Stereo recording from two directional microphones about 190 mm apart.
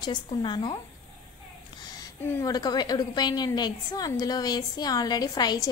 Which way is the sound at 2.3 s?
15° left (ahead or behind).